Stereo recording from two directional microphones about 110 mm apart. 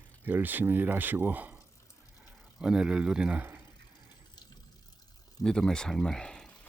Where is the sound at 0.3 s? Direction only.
15° right (ahead or behind).